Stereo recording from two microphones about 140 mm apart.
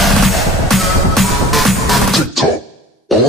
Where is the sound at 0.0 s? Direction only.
Centre (ahead or behind).